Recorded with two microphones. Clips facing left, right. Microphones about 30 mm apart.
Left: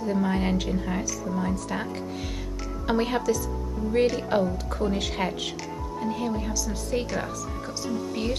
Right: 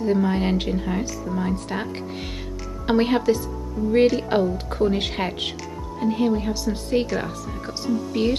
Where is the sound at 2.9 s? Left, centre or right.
Right.